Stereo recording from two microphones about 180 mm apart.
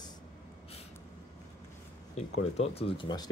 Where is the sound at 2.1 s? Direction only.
35° left (ahead or behind).